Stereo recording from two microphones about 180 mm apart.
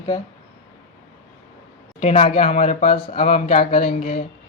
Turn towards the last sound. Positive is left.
turn(degrees=30)  # may be behind; listen again after turning